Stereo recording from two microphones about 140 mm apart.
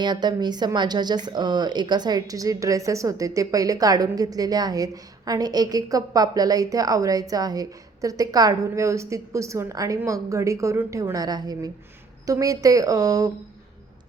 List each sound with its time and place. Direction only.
0.0 s a woman's voice: 30° right (ahead or behind)